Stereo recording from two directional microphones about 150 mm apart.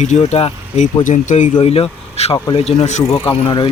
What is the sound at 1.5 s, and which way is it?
Speech, 40° left (ahead or behind).